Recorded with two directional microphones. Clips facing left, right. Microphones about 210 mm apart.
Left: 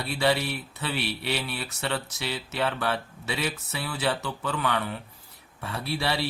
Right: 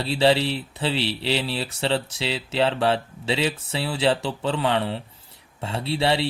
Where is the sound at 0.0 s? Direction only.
30° right (ahead or behind).